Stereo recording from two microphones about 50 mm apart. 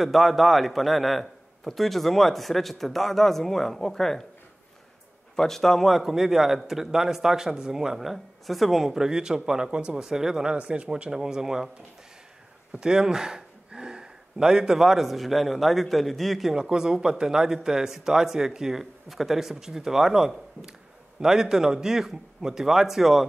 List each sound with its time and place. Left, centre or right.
0.0 s a man's voice: centre
5.3 s a man's voice: centre
10.5 s a man's voice: right
12.7 s speech: centre
16.5 s a man's voice: centre